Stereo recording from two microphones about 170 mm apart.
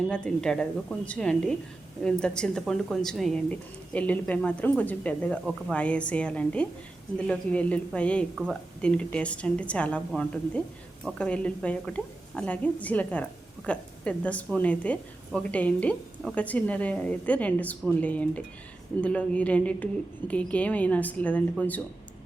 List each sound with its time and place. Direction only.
0.1 s speech: 5° left (ahead or behind)